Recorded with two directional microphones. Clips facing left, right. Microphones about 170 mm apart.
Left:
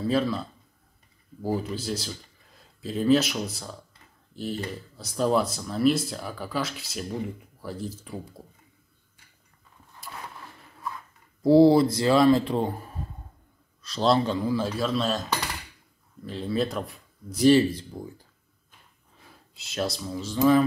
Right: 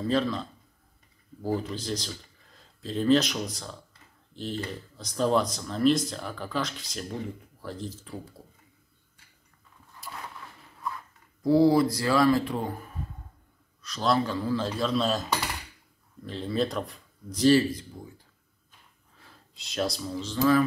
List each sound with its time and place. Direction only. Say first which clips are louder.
0.0 s speech: left 1 dB; 5° left (ahead or behind)
4.9 s speech: left 1 dB; 5° left (ahead or behind)
11.4 s speech: left 4 dB; 30° left (ahead or behind); by 15.2 s centre (ahead or behind)
16.3 s speech: left 1 dB; 5° left (ahead or behind)
17.5 s speech: left 2 dB; 25° left (ahead or behind)
19.5 s speech: even; 5° left (ahead or behind)
20.3 s speech: left 3 dB; 20° left (ahead or behind)